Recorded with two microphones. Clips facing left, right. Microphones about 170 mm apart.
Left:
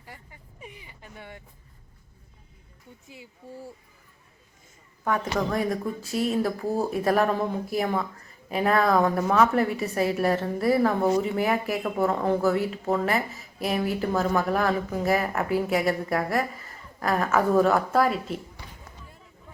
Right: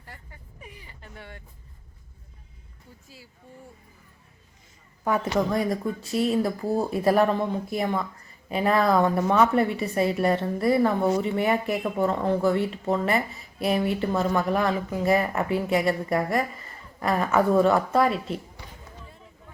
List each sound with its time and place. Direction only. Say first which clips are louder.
0.0 s vehicle: even; 15° left (ahead or behind)
3.4 s speech: left 7 dB; 35° left (ahead or behind)
5.0 s a woman's voice: right 2 dB; 5° right (ahead or behind)